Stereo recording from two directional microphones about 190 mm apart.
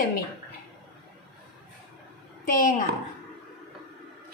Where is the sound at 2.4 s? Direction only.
45° left (ahead or behind).